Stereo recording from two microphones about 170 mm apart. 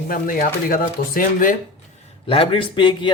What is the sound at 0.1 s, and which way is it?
Speech, 55° left (ahead or behind).